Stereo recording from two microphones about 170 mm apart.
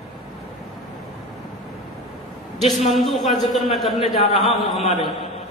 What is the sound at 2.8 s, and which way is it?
A man's voice, centre (ahead or behind).